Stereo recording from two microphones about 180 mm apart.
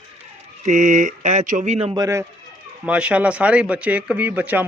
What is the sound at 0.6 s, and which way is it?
Speech, 40° right (ahead or behind).